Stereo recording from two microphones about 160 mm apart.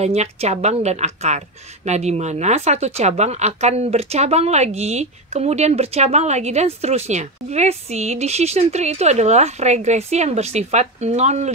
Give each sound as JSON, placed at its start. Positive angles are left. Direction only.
{"t": 0.0, "sound": "speech", "side_deg": -40}